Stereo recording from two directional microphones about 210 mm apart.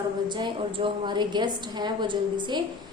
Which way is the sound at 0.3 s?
25° right (ahead or behind).